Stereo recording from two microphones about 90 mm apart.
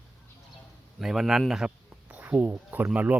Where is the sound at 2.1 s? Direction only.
20° right (ahead or behind).